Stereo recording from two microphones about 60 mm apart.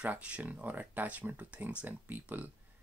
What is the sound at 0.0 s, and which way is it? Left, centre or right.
Speech, right.